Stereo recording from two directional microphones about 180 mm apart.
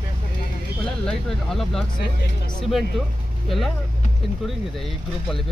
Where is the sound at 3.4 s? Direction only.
Centre (ahead or behind).